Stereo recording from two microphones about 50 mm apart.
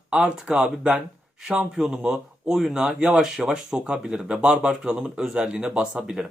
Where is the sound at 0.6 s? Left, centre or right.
Right.